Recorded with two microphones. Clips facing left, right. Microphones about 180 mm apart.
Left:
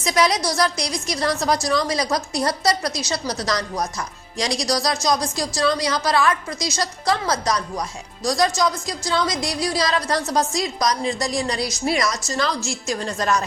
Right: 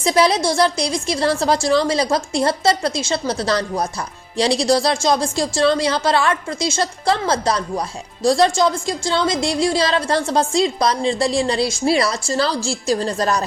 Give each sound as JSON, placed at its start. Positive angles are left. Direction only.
{"t": 0.0, "sound": "a woman's voice", "side_deg": -30}